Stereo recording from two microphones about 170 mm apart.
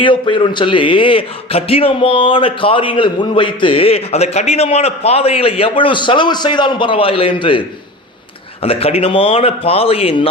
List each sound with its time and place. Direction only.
0.0 s a man's voice: 30° left (ahead or behind)
8.6 s a man's voice: 35° left (ahead or behind)